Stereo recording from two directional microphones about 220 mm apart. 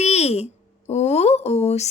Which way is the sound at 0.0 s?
30° left (ahead or behind).